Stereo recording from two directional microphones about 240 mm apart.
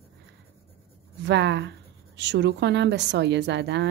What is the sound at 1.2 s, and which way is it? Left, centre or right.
A woman's voice, right.